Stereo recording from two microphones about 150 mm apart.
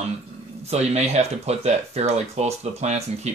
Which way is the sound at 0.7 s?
45° right (ahead or behind).